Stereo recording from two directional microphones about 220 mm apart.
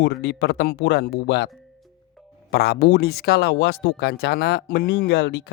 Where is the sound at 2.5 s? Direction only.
45° left (ahead or behind).